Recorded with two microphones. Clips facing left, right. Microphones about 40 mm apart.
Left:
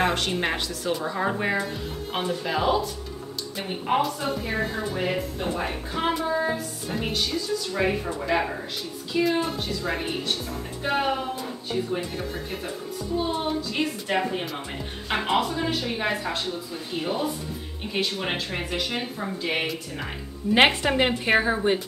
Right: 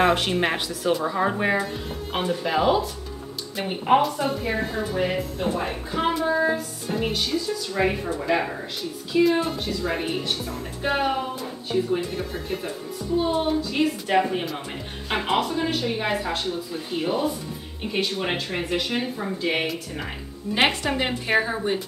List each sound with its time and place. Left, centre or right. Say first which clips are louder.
0.0 s speech: right 4 dB; centre
4.0 s a woman's voice: right 2 dB; centre
20.6 s a woman's voice: even; left